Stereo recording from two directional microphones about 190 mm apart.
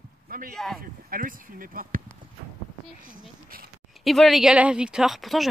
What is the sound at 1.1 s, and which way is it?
Speech, 50° right (ahead or behind).